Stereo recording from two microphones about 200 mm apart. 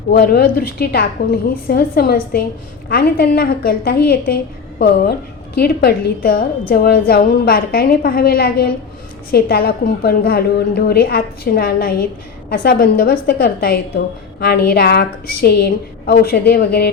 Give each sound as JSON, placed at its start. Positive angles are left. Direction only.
{"t": 0.1, "sound": "a woman's voice", "side_deg": 50}